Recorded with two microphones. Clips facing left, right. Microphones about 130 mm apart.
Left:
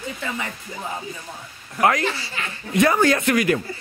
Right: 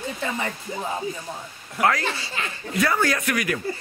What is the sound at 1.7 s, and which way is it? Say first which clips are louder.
Speech: left 3 dB; 20° left (ahead or behind).